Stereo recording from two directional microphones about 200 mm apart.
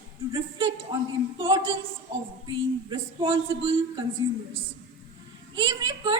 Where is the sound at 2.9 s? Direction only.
25° right (ahead or behind).